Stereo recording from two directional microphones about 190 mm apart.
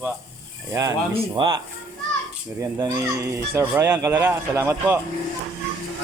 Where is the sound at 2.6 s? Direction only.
15° right (ahead or behind).